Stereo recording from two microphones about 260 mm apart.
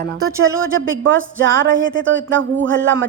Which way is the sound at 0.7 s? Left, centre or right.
Right.